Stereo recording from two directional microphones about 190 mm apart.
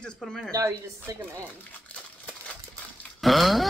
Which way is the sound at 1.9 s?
5° left (ahead or behind).